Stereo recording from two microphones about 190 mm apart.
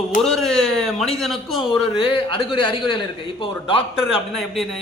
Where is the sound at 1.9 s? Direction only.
25° left (ahead or behind).